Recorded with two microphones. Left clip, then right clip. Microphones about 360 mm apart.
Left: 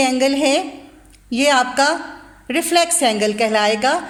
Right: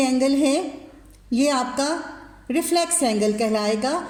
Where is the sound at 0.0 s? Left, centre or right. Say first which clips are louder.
Left 4 dB; left.